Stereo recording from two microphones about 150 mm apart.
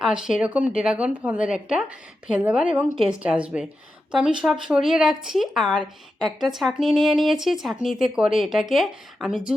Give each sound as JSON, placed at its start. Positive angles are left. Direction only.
{"t": 0.0, "sound": "speech", "side_deg": -5}